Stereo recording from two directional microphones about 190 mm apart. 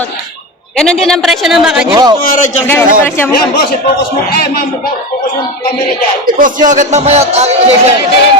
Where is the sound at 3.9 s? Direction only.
55° left (ahead or behind).